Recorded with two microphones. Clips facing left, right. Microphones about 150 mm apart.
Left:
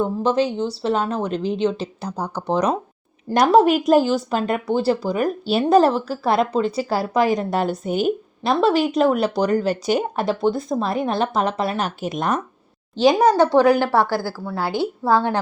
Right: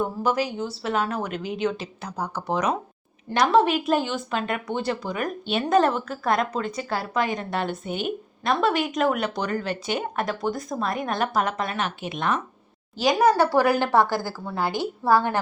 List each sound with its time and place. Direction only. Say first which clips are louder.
0.0 s speech: left 5 dB; 25° left (ahead or behind)
13.8 s a woman's voice: left 2 dB; 15° right (ahead or behind)
15.1 s a woman's voice: left 2 dB; 15° left (ahead or behind)